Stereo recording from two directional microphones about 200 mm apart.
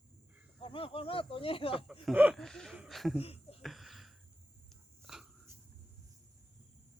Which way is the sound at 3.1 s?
30° left (ahead or behind).